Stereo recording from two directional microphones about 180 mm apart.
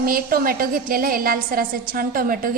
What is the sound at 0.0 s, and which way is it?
A woman's voice, 55° right (ahead or behind).